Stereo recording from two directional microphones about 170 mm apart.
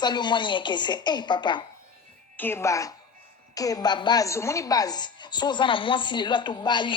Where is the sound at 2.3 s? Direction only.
15° left (ahead or behind).